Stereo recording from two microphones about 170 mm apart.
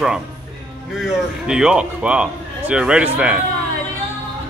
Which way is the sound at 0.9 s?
5° right (ahead or behind).